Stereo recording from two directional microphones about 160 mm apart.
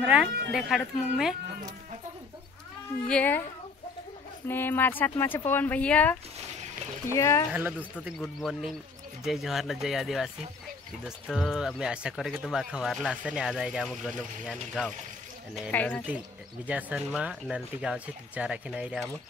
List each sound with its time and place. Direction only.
0.0 s speech: 10° right (ahead or behind)
3.1 s speech: 10° left (ahead or behind)
4.5 s speech: 15° left (ahead or behind)
8.0 s speech: centre (ahead or behind)
13.8 s speech: 5° left (ahead or behind)
15.7 s speech: 10° left (ahead or behind)
16.6 s speech: 10° right (ahead or behind)